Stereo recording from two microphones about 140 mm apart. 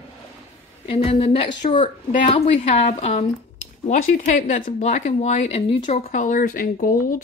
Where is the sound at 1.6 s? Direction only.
55° left (ahead or behind).